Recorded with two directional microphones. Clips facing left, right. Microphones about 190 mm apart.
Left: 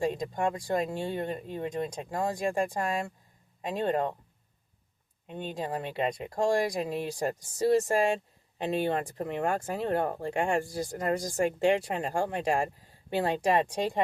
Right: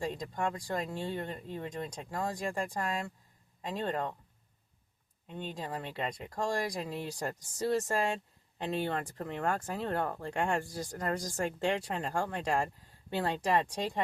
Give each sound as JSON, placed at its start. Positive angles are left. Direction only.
{"t": 0.0, "sound": "speech", "side_deg": 15}
{"t": 3.6, "sound": "speech", "side_deg": 15}
{"t": 5.3, "sound": "speech", "side_deg": 15}